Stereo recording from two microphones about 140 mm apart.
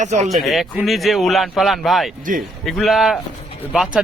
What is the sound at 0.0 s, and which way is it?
Speech, 55° right (ahead or behind).